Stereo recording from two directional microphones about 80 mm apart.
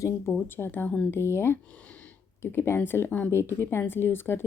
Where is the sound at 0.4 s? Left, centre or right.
Left.